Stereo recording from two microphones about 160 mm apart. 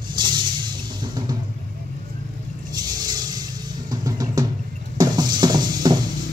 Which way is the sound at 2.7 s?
25° right (ahead or behind).